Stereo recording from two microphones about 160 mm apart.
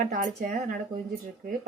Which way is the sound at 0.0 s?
55° right (ahead or behind).